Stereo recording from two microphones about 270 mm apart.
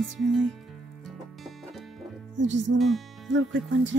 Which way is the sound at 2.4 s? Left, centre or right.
Right.